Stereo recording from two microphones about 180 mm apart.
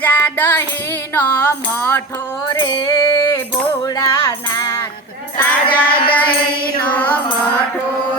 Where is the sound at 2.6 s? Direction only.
25° left (ahead or behind).